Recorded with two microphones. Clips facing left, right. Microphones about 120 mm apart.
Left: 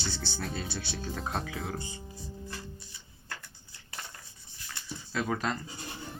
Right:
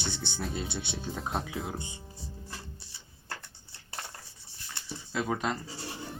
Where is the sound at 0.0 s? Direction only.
20° right (ahead or behind).